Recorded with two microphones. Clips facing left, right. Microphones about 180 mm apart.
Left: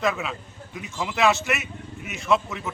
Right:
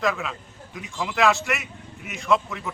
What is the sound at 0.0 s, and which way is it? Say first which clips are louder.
A man's voice: even; centre (ahead or behind).